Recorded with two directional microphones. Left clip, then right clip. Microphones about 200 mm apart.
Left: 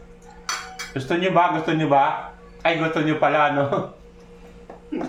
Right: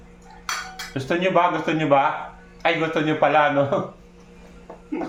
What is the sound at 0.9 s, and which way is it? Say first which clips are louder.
A man's voice: left 1 dB; 15° right (ahead or behind).